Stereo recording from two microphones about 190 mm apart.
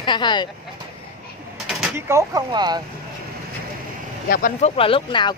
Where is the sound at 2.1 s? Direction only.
15° right (ahead or behind).